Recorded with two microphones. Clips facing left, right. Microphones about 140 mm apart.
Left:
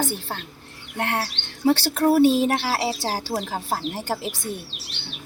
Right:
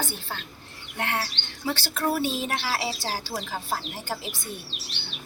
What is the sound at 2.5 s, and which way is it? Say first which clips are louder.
Speech: left 5 dB; 35° left (ahead or behind).